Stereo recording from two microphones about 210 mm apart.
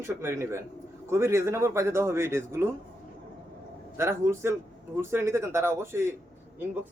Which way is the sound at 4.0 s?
10° right (ahead or behind).